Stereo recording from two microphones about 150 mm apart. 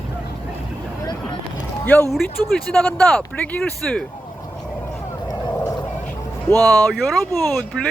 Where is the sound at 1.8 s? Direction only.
10° left (ahead or behind).